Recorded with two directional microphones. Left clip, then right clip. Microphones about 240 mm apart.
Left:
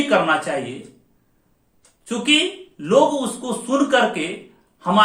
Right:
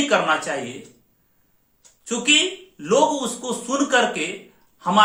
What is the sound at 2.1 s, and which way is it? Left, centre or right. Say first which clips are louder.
Speech: even; centre.